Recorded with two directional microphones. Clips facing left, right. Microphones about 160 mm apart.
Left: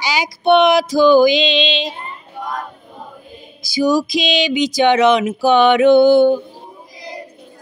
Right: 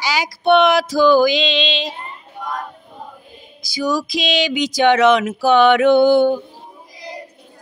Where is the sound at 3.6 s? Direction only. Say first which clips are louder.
Left 5 dB; 5° left (ahead or behind); by 6.4 s 10° right (ahead or behind).